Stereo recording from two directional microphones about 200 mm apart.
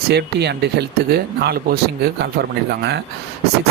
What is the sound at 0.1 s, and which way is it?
Speech, 55° right (ahead or behind).